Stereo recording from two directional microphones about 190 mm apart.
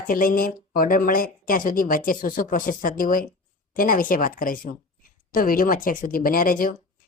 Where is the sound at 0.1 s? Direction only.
50° left (ahead or behind).